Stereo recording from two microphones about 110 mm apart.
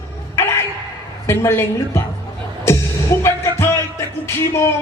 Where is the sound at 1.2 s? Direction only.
25° left (ahead or behind).